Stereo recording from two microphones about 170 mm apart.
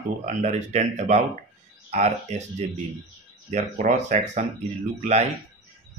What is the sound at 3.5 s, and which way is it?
Speech, 45° right (ahead or behind).